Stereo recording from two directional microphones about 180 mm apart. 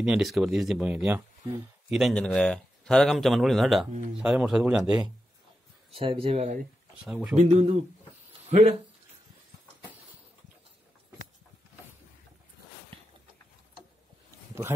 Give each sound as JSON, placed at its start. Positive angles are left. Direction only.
{"t": 0.0, "sound": "speech", "side_deg": 0}
{"t": 5.9, "sound": "speech", "side_deg": -30}